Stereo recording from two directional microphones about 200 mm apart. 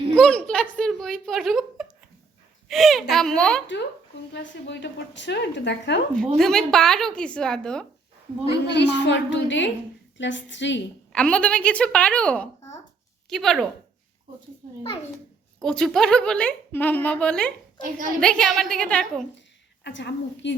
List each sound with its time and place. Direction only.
0.2 s a sound: 5° left (ahead or behind)
2.6 s a woman's voice: centre (ahead or behind)
4.3 s a woman's voice: 65° left (ahead or behind)
6.1 s a woman's voice: centre (ahead or behind)
8.6 s a woman's voice: 60° left (ahead or behind)
11.1 s a woman's voice: 5° left (ahead or behind)
15.6 s a woman's voice: 5° left (ahead or behind)
17.8 s a woman's voice: 40° right (ahead or behind)
18.2 s a woman's voice: 5° left (ahead or behind)
19.8 s a woman's voice: 65° left (ahead or behind)